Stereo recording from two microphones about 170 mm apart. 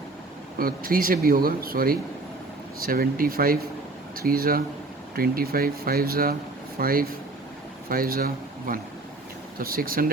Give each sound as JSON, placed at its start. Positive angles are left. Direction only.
{"t": 0.6, "sound": "speech", "side_deg": -55}